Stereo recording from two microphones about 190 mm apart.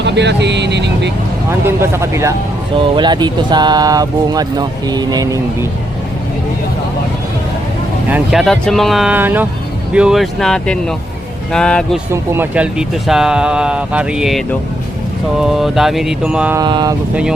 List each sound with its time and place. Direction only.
0.0 s speech: 65° right (ahead or behind)
1.5 s speech: 15° right (ahead or behind)
8.1 s speech: centre (ahead or behind)
12.1 s speech: 10° right (ahead or behind)
16.6 s speech: 20° right (ahead or behind)